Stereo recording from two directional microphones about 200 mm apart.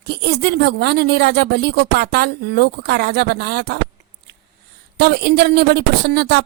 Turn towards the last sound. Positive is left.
turn(degrees=-55)  # may be behind; listen again after turning